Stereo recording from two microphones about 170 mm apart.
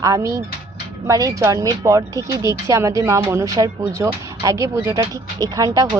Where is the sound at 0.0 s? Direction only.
20° right (ahead or behind).